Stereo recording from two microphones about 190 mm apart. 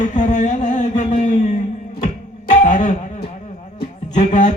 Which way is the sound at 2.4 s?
40° left (ahead or behind).